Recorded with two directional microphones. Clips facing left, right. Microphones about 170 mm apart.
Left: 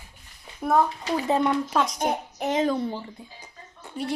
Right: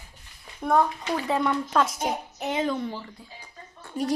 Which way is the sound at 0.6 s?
Centre (ahead or behind).